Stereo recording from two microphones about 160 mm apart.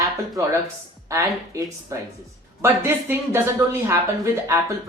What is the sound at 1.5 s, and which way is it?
Speech, 20° right (ahead or behind).